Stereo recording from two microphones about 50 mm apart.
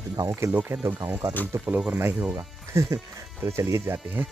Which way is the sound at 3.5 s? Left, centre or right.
Right.